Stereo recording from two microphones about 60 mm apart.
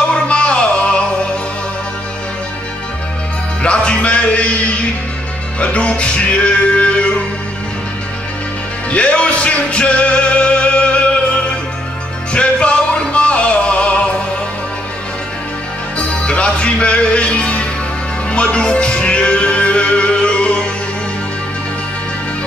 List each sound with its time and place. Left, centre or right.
0.1 s music: centre
3.6 s music: centre
5.6 s music: left
8.9 s music: centre
12.4 s music: centre
16.3 s music: centre